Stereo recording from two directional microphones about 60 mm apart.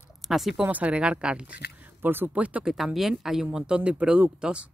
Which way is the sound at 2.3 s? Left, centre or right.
Right.